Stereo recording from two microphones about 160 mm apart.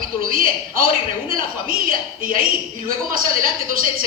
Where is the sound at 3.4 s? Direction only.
60° right (ahead or behind).